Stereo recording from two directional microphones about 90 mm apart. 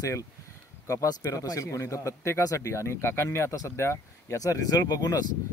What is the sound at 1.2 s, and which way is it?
Speech, 40° left (ahead or behind).